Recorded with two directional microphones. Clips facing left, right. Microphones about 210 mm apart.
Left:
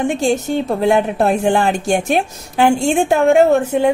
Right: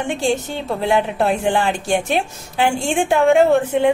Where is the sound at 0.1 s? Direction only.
45° left (ahead or behind).